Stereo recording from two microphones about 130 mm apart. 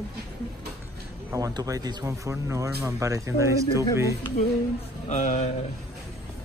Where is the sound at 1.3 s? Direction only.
25° right (ahead or behind).